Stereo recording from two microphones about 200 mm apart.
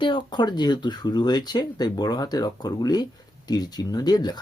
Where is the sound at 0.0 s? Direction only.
25° left (ahead or behind).